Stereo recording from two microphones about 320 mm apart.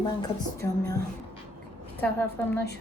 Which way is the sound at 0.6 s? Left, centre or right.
Right.